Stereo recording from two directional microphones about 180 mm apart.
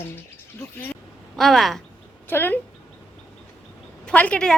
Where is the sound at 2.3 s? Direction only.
10° left (ahead or behind).